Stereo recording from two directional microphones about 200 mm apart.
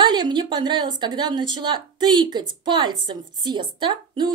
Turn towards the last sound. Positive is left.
turn(degrees=-20)  # may be behind; listen again after turning